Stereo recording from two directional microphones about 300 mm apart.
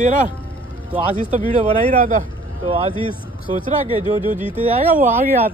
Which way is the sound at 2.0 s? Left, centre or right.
Right.